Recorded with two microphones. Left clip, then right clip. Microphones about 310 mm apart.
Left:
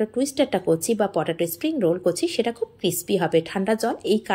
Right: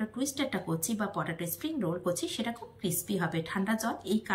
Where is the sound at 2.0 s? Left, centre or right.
Centre.